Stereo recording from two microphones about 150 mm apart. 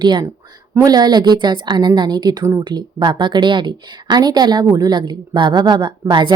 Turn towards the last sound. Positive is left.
turn(degrees=-30)  # may be behind; listen again after turning